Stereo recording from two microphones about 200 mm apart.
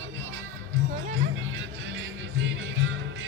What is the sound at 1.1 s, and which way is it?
Music, 65° right (ahead or behind).